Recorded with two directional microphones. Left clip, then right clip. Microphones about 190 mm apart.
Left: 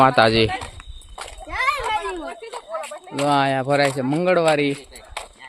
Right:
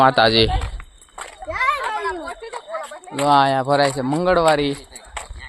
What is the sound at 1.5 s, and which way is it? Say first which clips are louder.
Children playing: right 1 dB; 50° left (ahead or behind).